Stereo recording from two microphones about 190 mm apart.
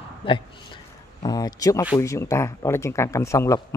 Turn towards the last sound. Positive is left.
turn(degrees=15)  # may be behind; listen again after turning